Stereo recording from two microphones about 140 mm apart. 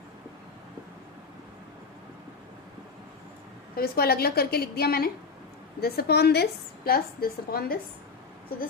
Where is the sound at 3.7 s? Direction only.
90° left.